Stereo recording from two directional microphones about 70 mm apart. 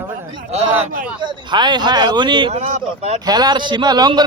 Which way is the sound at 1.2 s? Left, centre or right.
Right.